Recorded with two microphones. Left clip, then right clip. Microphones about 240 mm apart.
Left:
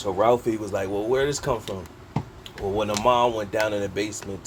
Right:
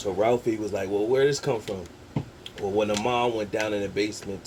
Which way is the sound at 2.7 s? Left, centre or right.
Left.